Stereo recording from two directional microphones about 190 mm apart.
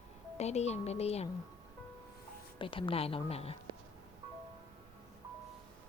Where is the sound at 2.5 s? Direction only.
25° left (ahead or behind).